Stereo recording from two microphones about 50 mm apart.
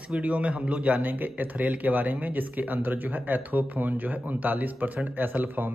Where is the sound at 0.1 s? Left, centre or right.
Right.